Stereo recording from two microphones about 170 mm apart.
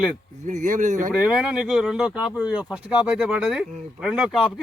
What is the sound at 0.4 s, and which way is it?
Speech, 45° right (ahead or behind).